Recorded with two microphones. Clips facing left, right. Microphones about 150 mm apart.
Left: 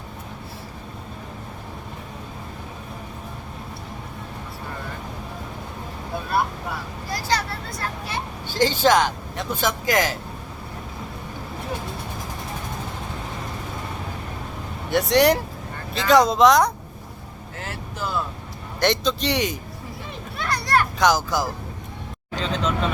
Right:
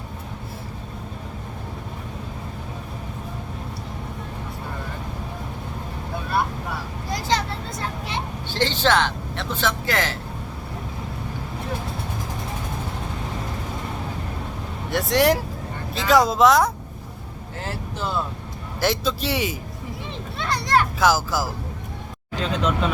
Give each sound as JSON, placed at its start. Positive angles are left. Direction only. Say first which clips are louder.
{"t": 7.1, "sound": "vehicle", "louder": "right 1 dB", "side_deg": -20}
{"t": 8.5, "sound": "speech", "louder": "left 2 dB", "side_deg": 10}
{"t": 14.8, "sound": "speech", "louder": "left 2 dB", "side_deg": 0}
{"t": 17.6, "sound": "speech", "louder": "right 2 dB", "side_deg": -30}
{"t": 18.8, "sound": "speech", "louder": "left 1 dB", "side_deg": -5}
{"t": 20.4, "sound": "a sound", "louder": "right 1 dB", "side_deg": -20}
{"t": 21.0, "sound": "speech", "louder": "even", "side_deg": -5}